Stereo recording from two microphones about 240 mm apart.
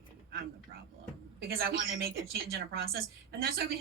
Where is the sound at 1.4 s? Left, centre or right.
Right.